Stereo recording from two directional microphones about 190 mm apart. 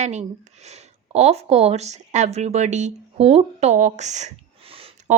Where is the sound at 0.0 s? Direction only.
35° right (ahead or behind).